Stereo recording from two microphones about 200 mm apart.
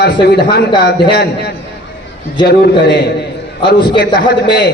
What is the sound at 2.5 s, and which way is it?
Speech, 55° left (ahead or behind).